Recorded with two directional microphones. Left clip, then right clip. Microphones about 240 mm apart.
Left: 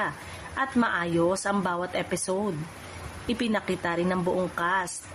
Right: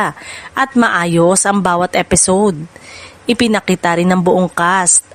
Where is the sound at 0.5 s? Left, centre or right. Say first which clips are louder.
Right 13 dB; right.